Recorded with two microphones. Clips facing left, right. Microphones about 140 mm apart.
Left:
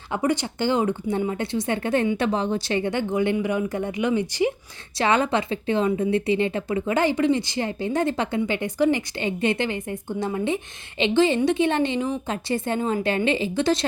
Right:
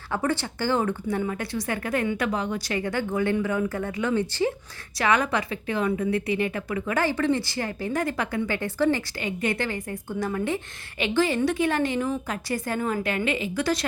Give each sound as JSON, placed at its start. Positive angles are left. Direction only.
{"t": 0.1, "sound": "a woman's voice", "side_deg": 15}
{"t": 4.9, "sound": "a woman's voice", "side_deg": 25}